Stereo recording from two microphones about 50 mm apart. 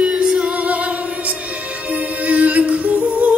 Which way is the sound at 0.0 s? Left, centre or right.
Centre.